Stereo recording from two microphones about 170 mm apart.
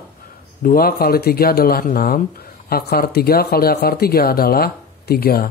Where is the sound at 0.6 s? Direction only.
60° left (ahead or behind).